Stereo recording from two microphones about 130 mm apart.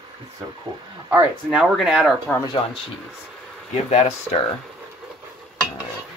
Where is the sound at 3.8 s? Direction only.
60° left (ahead or behind).